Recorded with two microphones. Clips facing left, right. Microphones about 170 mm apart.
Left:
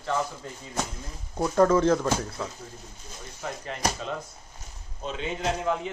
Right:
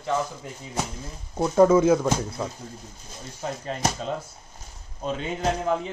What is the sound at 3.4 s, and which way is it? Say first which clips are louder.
Speech: right 3 dB; 30° right (ahead or behind).